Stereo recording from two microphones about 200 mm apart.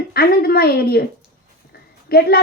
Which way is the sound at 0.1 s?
50° left (ahead or behind).